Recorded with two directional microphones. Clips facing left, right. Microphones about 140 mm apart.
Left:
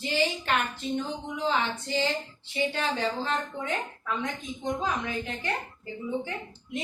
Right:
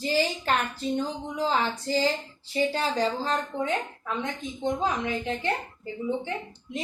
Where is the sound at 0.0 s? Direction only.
40° right (ahead or behind).